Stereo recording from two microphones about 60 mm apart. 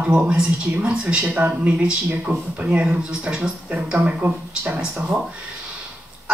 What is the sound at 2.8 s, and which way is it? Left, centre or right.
Speech, centre.